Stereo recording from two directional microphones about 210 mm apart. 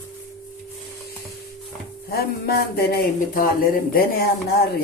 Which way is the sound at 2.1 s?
45° left (ahead or behind).